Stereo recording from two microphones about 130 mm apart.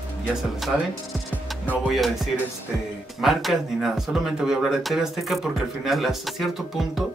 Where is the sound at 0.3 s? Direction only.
Centre (ahead or behind).